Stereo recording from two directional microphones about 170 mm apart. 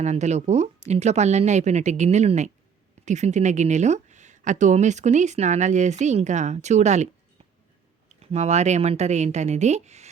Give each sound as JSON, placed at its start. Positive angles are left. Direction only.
{"t": 0.0, "sound": "speech", "side_deg": -40}
{"t": 8.2, "sound": "speech", "side_deg": -40}